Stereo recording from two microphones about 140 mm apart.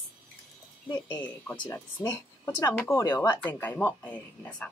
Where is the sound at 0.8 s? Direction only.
30° left (ahead or behind).